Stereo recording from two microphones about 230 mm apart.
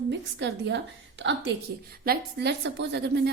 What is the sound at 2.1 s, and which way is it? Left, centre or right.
A woman's voice, right.